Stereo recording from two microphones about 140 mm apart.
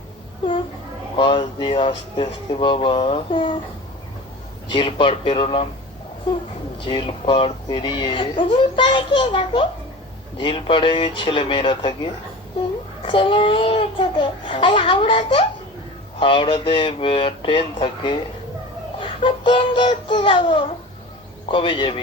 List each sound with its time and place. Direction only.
1.1 s speech: 40° left (ahead or behind)
4.7 s speech: 40° left (ahead or behind)
6.7 s speech: 40° left (ahead or behind)
13.1 s speech: 40° left (ahead or behind)